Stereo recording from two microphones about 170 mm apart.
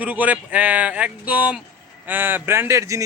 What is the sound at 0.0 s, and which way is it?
Speech, 10° right (ahead or behind).